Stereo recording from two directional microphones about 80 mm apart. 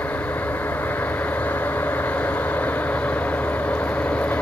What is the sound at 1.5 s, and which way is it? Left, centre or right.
Vehicle, centre.